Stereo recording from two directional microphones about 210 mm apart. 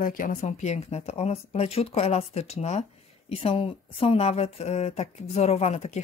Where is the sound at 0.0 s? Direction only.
40° left (ahead or behind).